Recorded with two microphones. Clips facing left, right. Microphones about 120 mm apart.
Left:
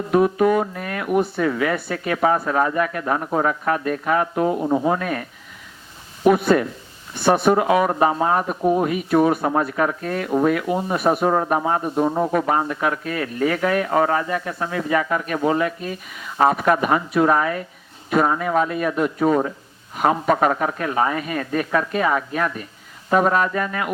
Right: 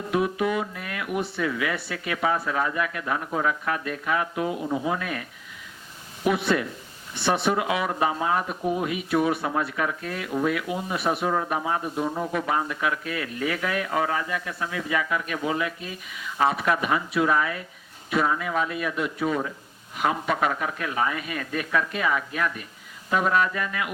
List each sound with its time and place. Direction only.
0.1 s speech: 45° left (ahead or behind)
6.2 s speech: 45° left (ahead or behind)